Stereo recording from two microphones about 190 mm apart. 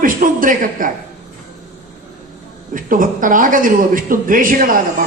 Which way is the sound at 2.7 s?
45° right (ahead or behind).